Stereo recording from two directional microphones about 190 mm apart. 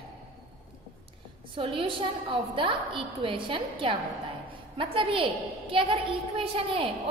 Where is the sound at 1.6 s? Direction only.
25° right (ahead or behind).